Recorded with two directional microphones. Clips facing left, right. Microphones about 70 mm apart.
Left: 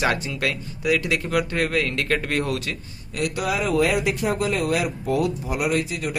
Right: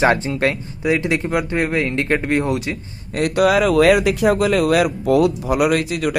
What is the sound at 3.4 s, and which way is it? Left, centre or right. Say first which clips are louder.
Speech: right 8 dB; right.